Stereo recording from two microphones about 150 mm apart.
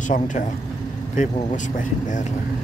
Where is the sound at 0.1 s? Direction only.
60° left (ahead or behind).